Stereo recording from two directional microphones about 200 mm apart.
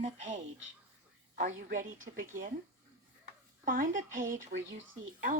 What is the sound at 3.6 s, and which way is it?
A woman's voice, 45° right (ahead or behind).